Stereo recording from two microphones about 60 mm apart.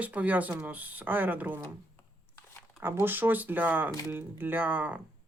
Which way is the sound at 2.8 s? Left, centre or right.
Right.